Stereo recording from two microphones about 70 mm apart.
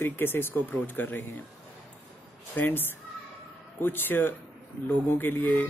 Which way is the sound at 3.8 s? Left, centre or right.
Left.